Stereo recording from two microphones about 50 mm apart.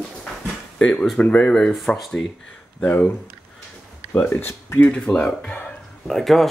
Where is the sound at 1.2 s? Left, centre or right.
Left.